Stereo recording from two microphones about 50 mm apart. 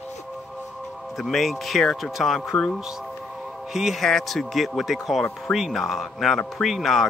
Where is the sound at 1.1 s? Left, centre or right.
Centre.